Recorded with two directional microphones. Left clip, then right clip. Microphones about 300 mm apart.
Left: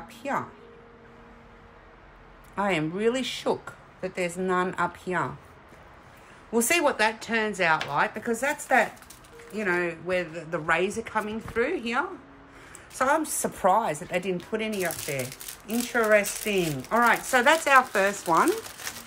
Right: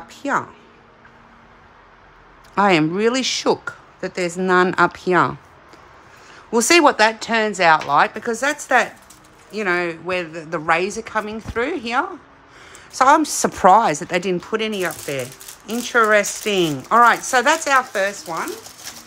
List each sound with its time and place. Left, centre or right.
2.5 s speech: right
6.5 s speech: right; by 18.1 s centre
18.2 s speech: centre